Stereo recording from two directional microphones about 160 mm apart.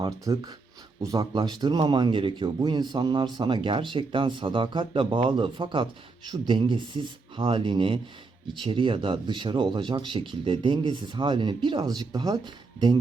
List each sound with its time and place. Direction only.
0.0 s speech: 25° right (ahead or behind)